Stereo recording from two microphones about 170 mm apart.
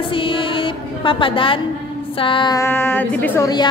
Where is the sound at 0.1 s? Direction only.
30° left (ahead or behind).